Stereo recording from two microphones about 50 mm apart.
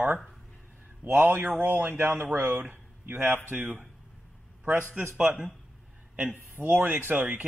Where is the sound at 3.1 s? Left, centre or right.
Right.